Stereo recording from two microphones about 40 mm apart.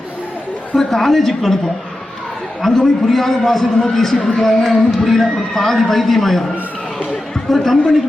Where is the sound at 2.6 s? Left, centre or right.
Centre.